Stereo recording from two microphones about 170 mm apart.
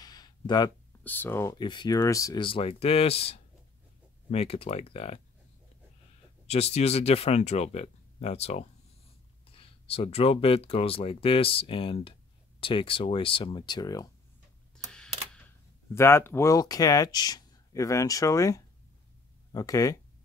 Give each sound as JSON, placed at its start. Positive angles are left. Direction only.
{"t": 0.0, "sound": "a sound", "side_deg": 25}
{"t": 1.0, "sound": "speech", "side_deg": 10}
{"t": 2.4, "sound": "speech", "side_deg": 35}
{"t": 6.4, "sound": "speech", "side_deg": 40}
{"t": 15.9, "sound": "speech", "side_deg": 15}